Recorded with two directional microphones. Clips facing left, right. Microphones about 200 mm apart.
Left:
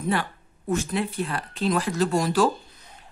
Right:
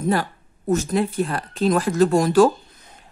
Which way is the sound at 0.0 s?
40° right (ahead or behind).